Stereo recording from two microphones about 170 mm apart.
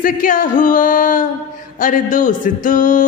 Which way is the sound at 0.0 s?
50° left (ahead or behind).